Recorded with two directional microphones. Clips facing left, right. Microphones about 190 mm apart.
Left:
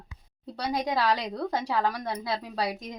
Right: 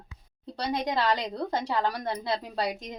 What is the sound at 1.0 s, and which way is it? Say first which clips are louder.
Speech: even; 25° right (ahead or behind).